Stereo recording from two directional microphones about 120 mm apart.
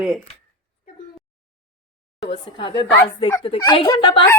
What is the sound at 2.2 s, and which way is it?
A woman's voice, 45° left (ahead or behind).